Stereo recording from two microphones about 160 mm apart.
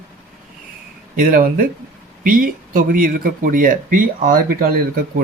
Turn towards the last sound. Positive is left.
turn(degrees=-65)  # may be behind; listen again after turning